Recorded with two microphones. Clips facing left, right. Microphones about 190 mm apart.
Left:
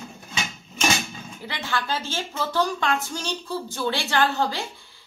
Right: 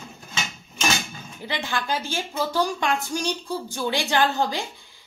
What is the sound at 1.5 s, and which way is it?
Speech, 15° right (ahead or behind).